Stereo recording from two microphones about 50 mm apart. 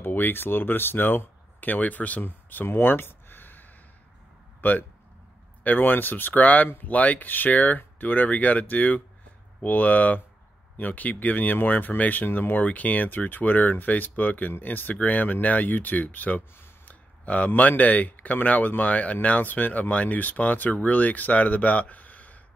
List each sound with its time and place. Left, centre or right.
0.0 s speech: left
2.2 s a sound: left
4.6 s speech: left